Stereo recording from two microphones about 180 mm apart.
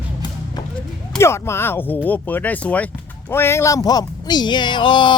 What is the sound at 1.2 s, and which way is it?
Speech, 15° left (ahead or behind).